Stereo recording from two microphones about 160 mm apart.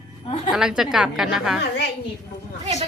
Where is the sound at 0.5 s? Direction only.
5° right (ahead or behind).